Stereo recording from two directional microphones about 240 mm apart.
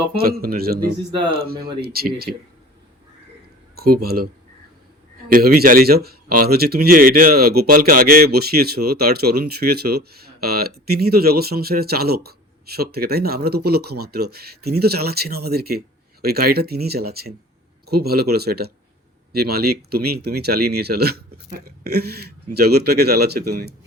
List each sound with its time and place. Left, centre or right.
0.2 s speech: right
3.8 s speech: right
5.3 s speech: right